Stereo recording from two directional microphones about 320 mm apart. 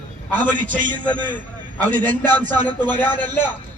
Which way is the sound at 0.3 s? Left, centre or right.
Right.